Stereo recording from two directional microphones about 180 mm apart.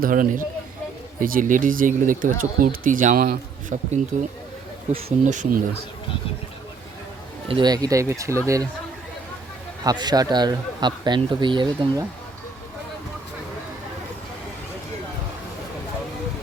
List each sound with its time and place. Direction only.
0.0 s speech: 50° right (ahead or behind)
4.9 s speech: 40° right (ahead or behind)
7.4 s speech: 25° right (ahead or behind)
9.8 s a man's voice: 25° right (ahead or behind)